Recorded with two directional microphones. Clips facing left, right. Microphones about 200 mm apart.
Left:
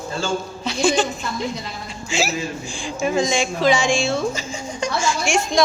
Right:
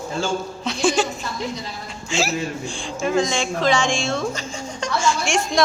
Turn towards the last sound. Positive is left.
turn(degrees=0)  # may be behind; listen again after turning